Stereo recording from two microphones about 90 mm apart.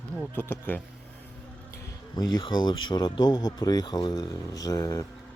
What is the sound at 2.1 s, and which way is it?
Speech, 50° left (ahead or behind).